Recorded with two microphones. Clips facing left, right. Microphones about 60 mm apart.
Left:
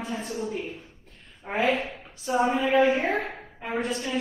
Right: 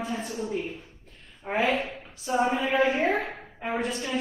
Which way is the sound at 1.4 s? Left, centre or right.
Centre.